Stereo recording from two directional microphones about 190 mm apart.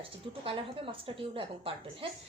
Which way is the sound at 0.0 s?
30° right (ahead or behind).